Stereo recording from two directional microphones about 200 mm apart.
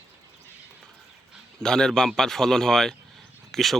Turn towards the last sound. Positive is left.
turn(degrees=0)  # may be behind; listen again after turning